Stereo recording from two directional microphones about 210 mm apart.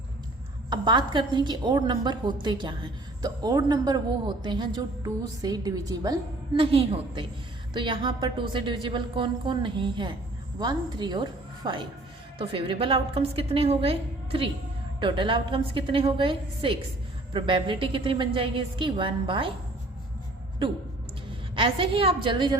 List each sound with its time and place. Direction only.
0.7 s a woman's voice: 20° right (ahead or behind)
21.5 s a woman's voice: 25° right (ahead or behind)